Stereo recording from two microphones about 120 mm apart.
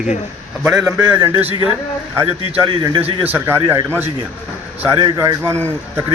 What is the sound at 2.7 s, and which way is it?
Speech, 45° right (ahead or behind).